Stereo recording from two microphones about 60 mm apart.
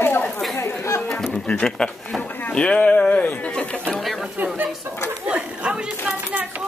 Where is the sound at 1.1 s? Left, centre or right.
Centre.